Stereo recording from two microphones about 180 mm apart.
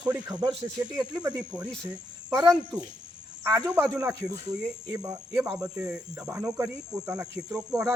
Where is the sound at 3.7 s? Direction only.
5° right (ahead or behind).